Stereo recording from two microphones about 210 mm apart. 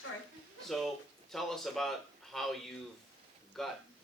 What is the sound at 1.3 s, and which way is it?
A man's voice, centre (ahead or behind).